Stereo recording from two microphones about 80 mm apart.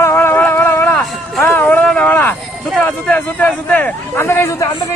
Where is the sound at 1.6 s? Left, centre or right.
Centre.